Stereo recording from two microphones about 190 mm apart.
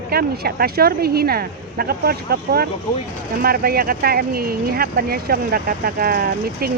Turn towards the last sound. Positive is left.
turn(degrees=-50)  # may be behind; listen again after turning